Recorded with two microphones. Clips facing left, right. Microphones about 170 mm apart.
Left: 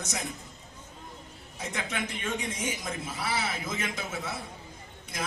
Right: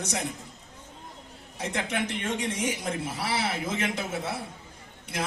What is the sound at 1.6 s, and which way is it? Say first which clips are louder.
A man's voice: right 4 dB; 65° right (ahead or behind).